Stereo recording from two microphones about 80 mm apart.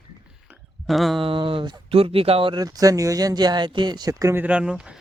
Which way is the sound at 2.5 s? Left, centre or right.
Right.